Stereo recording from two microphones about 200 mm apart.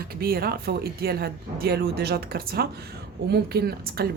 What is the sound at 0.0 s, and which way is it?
Speech, 50° right (ahead or behind).